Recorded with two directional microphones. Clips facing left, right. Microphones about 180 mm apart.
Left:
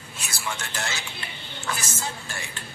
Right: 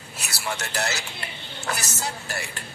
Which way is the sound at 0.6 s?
40° right (ahead or behind).